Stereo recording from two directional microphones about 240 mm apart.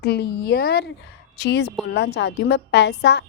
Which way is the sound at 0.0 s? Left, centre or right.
Left.